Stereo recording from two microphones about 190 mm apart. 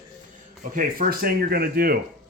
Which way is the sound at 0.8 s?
50° right (ahead or behind).